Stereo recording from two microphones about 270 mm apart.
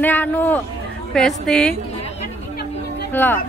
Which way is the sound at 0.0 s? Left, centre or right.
Centre.